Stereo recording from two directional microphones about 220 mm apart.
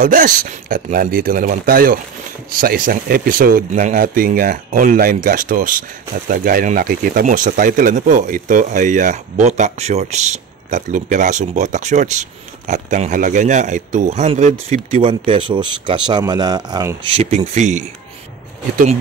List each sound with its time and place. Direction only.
0.0 s speech: 40° right (ahead or behind)